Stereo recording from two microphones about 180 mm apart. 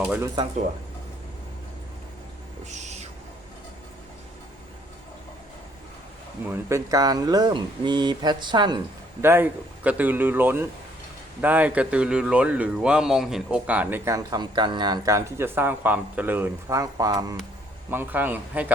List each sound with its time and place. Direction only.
2.6 s owl: 40° right (ahead or behind)
6.4 s speech: 15° right (ahead or behind)
9.2 s speech: 10° right (ahead or behind)